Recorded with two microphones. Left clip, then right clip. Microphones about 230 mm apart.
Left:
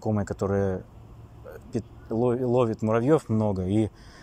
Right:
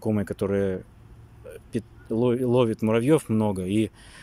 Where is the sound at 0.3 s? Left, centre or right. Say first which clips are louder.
Right 1 dB; right.